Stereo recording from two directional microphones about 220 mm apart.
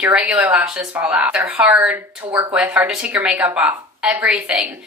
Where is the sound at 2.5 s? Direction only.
5° right (ahead or behind).